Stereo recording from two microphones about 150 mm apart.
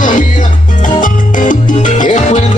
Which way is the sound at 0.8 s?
60° left (ahead or behind).